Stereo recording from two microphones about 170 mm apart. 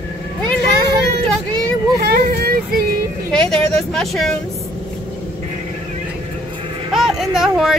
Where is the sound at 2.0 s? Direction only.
65° right (ahead or behind).